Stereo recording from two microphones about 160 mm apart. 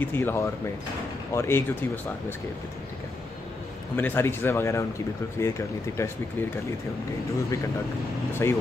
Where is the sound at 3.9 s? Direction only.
15° left (ahead or behind).